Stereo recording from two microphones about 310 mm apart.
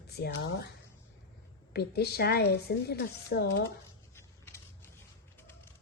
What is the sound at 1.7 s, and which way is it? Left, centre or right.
Speech, left.